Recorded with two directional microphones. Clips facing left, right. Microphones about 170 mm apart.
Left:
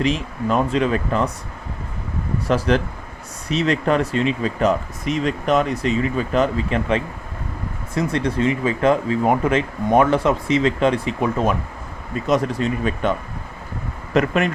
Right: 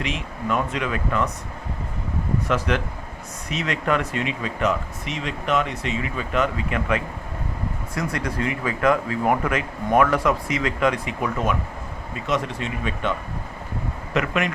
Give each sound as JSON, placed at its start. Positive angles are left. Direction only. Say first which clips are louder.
{"t": 0.0, "sound": "speech", "louder": "left 7 dB", "side_deg": 35}
{"t": 2.5, "sound": "speech", "louder": "left 7 dB", "side_deg": 35}